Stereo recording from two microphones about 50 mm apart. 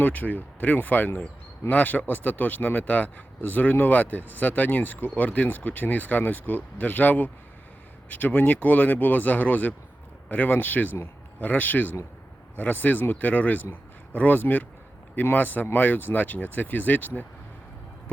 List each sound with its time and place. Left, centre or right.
0.0 s a man's voice: left